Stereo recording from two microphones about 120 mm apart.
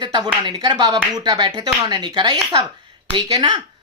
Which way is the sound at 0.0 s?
40° right (ahead or behind).